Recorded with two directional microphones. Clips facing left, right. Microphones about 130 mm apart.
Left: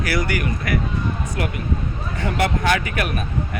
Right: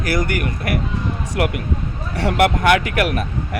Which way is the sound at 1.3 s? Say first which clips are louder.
Right 4 dB; 80° right.